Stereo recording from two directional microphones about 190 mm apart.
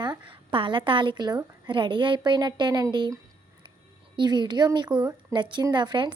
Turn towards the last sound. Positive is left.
turn(degrees=-25)  # may be behind; listen again after turning